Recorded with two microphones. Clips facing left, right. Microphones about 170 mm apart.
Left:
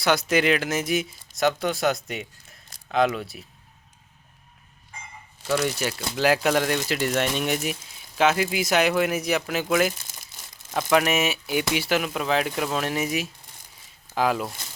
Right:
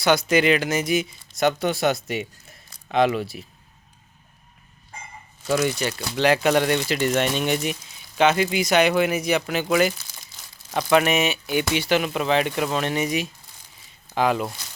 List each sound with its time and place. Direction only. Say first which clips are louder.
0.0 s speech: right 3 dB; centre (ahead or behind)
5.6 s speech: right 2 dB; 5° left (ahead or behind)